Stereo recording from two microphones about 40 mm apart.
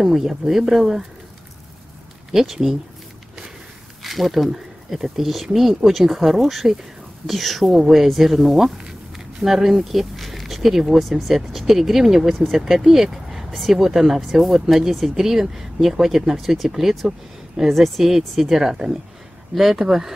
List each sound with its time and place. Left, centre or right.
0.0 s speech: centre
2.3 s speech: centre
4.0 s speech: centre
8.7 s a sound: centre
9.4 s speech: centre